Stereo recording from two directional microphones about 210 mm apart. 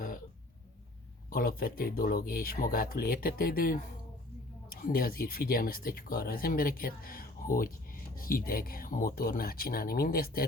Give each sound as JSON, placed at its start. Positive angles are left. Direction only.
{"t": 1.3, "sound": "speech", "side_deg": 45}